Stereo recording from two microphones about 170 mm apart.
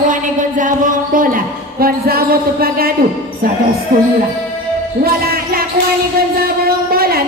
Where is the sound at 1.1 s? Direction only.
55° right (ahead or behind).